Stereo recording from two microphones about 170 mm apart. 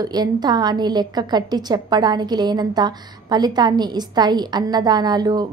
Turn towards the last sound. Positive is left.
turn(degrees=-25)  # may be behind; listen again after turning